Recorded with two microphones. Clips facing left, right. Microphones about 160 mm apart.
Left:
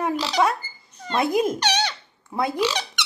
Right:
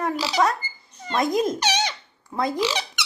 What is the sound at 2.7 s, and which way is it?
Squeak, 10° right (ahead or behind).